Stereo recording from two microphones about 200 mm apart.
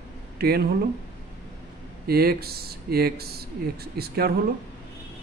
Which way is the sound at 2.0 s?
50° right (ahead or behind).